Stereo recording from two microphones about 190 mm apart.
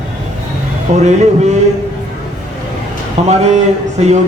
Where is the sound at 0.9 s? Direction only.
35° right (ahead or behind).